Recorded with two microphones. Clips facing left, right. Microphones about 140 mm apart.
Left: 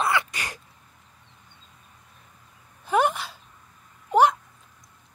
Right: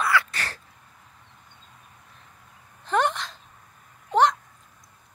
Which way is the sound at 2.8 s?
10° left (ahead or behind).